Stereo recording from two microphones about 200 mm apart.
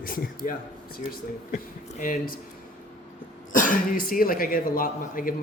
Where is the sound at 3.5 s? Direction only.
40° left (ahead or behind).